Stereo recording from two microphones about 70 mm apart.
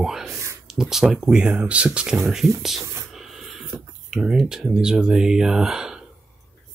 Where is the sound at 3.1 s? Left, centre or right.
Centre.